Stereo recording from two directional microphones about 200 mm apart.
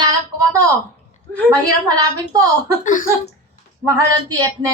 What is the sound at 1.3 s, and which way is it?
Speech, 5° left (ahead or behind).